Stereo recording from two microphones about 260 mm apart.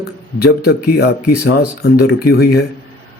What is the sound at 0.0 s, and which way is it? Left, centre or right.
Speech, left.